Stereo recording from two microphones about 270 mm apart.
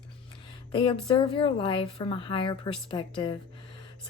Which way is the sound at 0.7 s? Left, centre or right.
Centre.